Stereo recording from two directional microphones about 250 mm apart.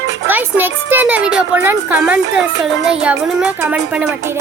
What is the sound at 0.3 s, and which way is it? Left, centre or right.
A child's voice, centre.